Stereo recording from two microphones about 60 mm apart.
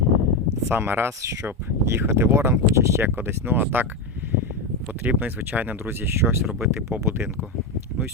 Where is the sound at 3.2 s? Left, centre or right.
Right.